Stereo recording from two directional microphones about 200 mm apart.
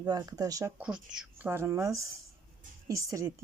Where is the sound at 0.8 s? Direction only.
5° right (ahead or behind).